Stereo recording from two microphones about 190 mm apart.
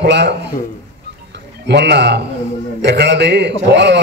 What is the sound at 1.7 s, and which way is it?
A man's voice, 65° right (ahead or behind).